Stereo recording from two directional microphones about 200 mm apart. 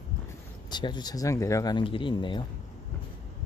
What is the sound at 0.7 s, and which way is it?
Speech, 20° left (ahead or behind).